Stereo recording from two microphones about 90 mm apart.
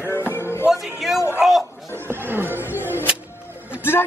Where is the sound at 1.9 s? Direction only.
25° right (ahead or behind).